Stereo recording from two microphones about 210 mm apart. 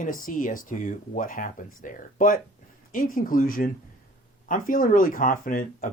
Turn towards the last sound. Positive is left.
turn(degrees=45)  # may be behind; listen again after turning